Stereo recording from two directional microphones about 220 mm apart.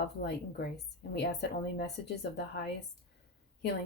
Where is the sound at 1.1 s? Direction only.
50° left (ahead or behind).